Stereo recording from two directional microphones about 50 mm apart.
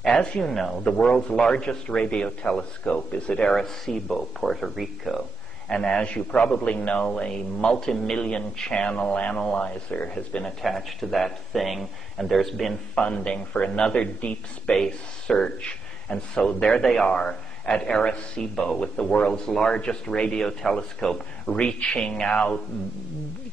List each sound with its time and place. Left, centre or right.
0.0 s a man's voice: centre
3.5 s speech: centre
5.7 s a man's voice: centre
10.6 s speech: centre
12.9 s a man's voice: left
21.5 s a man's voice: left